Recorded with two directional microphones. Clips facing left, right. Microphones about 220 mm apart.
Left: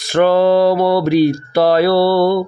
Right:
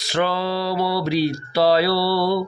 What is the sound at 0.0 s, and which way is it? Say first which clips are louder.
Speech: left 10 dB; 50° left (ahead or behind).